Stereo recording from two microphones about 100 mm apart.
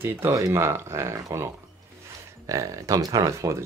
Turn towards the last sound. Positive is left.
turn(degrees=-30)  # may be behind; listen again after turning